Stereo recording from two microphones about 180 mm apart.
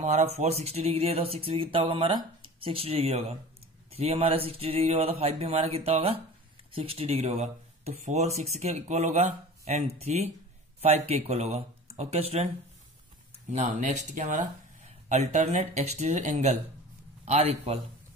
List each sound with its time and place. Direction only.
0.0 s speech: 40° right (ahead or behind)
13.5 s a man's voice: 40° right (ahead or behind)